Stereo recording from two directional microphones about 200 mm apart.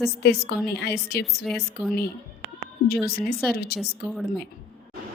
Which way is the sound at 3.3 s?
50° left (ahead or behind).